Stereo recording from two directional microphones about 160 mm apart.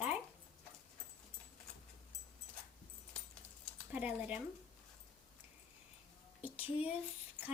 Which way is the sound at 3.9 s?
10° right (ahead or behind).